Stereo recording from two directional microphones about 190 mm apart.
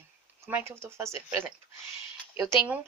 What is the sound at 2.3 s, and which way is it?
Speech, 15° right (ahead or behind).